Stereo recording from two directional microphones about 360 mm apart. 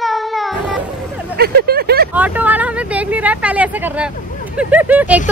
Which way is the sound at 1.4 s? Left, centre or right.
Right.